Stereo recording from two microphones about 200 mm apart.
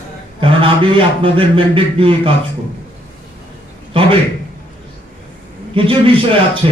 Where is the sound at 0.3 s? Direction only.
25° right (ahead or behind).